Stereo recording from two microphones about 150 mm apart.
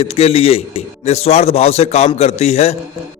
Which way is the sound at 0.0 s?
40° left (ahead or behind).